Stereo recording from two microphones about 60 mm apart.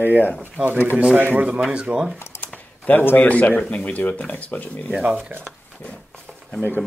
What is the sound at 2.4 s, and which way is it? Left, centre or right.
Speech, left.